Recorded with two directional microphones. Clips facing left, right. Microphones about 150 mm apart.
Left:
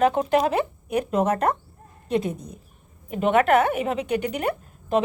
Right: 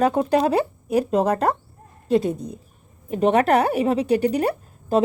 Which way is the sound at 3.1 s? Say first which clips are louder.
Right 1 dB; 35° right (ahead or behind).